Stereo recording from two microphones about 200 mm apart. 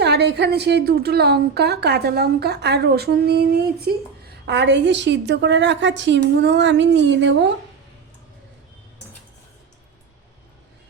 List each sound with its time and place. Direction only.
0.0 s a woman's voice: 55° right (ahead or behind)